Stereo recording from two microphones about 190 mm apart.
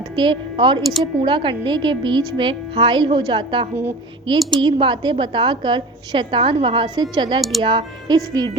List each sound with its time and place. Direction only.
0.0 s a woman's voice: 25° right (ahead or behind)
0.8 s speech: centre (ahead or behind)
1.2 s a woman's voice: 25° right (ahead or behind)